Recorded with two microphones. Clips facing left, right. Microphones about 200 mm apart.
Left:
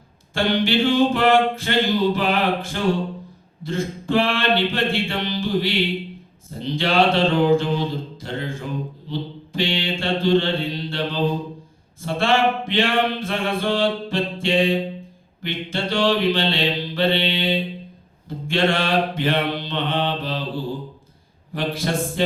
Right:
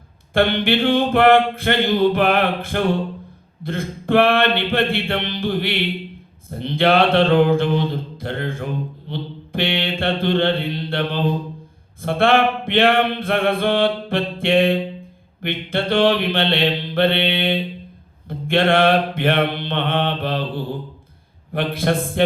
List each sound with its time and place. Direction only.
0.3 s mantra: 55° right (ahead or behind)